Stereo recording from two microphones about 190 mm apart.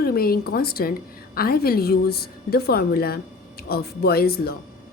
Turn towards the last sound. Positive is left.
turn(degrees=55)  # may be behind; listen again after turning